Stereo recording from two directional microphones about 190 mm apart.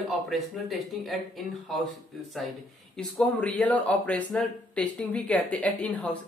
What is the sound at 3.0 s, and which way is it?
Speech, 5° left (ahead or behind).